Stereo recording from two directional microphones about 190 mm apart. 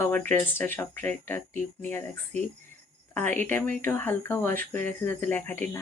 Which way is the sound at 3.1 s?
10° left (ahead or behind).